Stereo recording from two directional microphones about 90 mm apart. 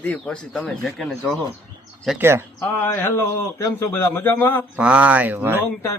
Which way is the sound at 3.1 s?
40° left (ahead or behind).